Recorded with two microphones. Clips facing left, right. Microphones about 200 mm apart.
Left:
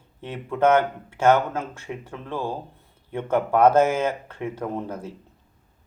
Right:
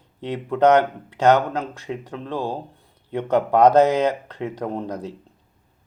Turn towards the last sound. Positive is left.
turn(degrees=-15)  # may be behind; listen again after turning